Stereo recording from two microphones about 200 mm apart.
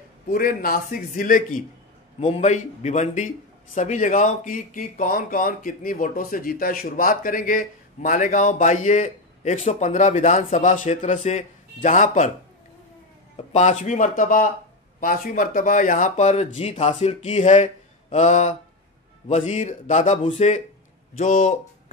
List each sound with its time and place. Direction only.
0.3 s a man's voice: 45° left (ahead or behind)
2.1 s a man's voice: 30° left (ahead or behind)
13.5 s a man's voice: 35° left (ahead or behind)